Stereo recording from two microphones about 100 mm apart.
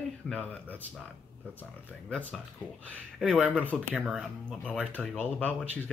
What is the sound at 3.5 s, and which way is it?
Speech, 15° left (ahead or behind).